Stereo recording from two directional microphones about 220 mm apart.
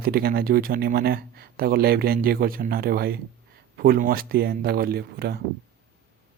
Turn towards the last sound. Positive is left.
turn(degrees=-45)  # may be behind; listen again after turning